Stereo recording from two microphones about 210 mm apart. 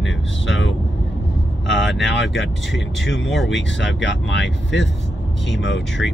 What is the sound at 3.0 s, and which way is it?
Speech, 65° left (ahead or behind).